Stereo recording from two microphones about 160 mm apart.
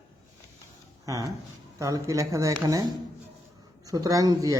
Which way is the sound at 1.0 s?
20° right (ahead or behind).